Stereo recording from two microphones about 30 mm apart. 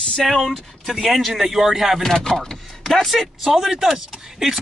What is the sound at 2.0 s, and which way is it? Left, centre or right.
Speech, centre.